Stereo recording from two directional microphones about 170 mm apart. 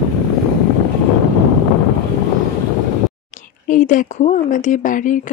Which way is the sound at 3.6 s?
50° left (ahead or behind).